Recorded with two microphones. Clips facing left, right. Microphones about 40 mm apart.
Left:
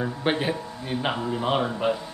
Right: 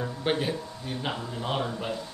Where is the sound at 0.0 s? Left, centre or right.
Left.